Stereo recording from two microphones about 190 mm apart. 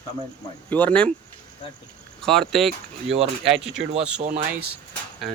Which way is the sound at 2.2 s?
Centre (ahead or behind).